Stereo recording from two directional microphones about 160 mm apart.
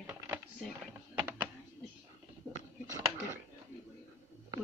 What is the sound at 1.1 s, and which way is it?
Typing, 10° right (ahead or behind).